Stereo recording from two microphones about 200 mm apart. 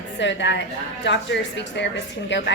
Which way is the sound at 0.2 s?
65° left (ahead or behind).